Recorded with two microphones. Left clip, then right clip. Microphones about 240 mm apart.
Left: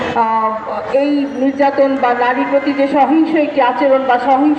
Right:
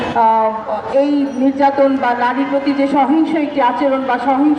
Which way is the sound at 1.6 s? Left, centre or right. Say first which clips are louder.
Left 1 dB; right.